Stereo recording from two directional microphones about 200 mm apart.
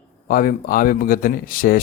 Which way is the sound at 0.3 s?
45° left (ahead or behind).